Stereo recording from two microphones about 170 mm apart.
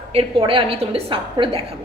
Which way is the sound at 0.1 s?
30° right (ahead or behind).